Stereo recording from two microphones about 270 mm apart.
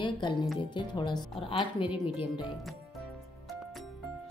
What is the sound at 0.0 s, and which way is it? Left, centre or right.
A woman's voice, centre.